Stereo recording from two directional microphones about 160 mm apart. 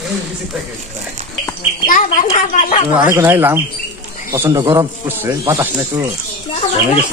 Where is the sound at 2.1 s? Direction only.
50° left (ahead or behind).